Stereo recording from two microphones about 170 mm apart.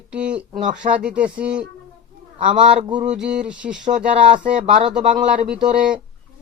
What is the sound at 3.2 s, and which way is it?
Speech, 5° right (ahead or behind).